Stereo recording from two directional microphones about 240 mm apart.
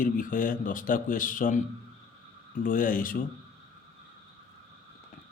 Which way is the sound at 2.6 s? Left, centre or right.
Left.